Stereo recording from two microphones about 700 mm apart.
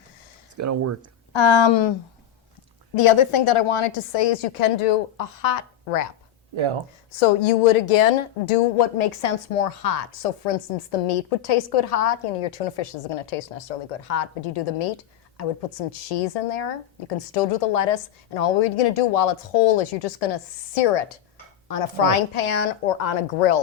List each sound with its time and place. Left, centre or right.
0.5 s speech: right
1.3 s speech: left
2.9 s a woman's voice: left
7.2 s a woman's voice: left
15.9 s a woman's voice: left